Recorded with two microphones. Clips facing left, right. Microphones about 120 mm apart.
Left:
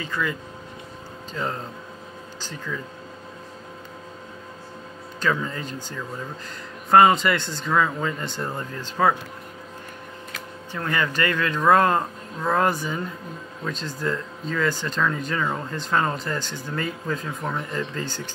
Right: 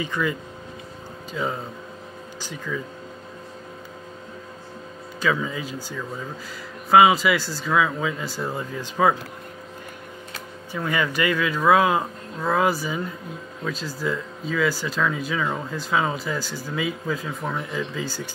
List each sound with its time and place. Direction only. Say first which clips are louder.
0.0 s speech: right 2 dB; 15° right (ahead or behind)
1.3 s speech: right 2 dB; 5° right (ahead or behind)
5.2 s speech: right 1 dB; 5° right (ahead or behind)
10.7 s speech: right 1 dB; 10° right (ahead or behind)